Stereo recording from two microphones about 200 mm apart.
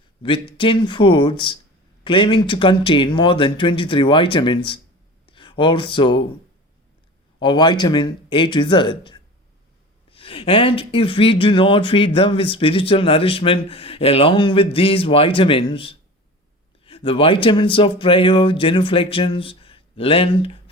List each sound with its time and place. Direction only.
0.5 s speech: 25° left (ahead or behind)
7.3 s speech: 20° left (ahead or behind)